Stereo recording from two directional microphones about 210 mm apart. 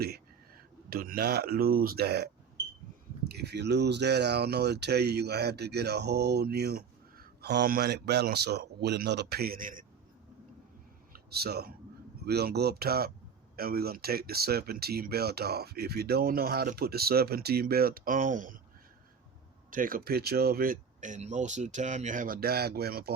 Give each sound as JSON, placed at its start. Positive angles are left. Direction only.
{"t": 0.9, "sound": "speech", "side_deg": -45}
{"t": 11.1, "sound": "a sound", "side_deg": -50}
{"t": 12.2, "sound": "speech", "side_deg": -50}
{"t": 19.7, "sound": "speech", "side_deg": -40}